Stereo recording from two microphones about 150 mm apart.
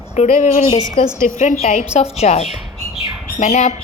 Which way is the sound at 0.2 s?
55° left (ahead or behind).